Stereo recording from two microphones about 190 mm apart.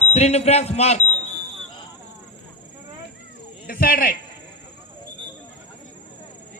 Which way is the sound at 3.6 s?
50° left (ahead or behind).